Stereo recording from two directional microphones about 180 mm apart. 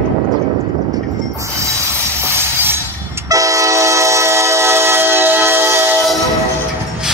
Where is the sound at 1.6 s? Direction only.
15° right (ahead or behind).